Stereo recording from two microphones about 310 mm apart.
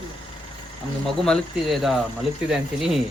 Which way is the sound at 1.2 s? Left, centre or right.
Centre.